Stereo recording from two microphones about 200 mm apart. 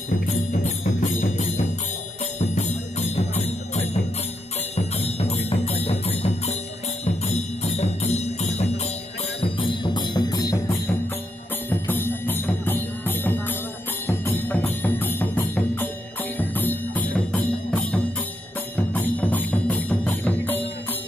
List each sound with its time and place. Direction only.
0.3 s music: 35° left (ahead or behind); by 20.6 s 10° left (ahead or behind)